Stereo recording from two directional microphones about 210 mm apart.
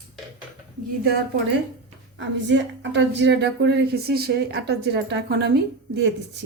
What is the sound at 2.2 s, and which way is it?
Speech, 60° right (ahead or behind).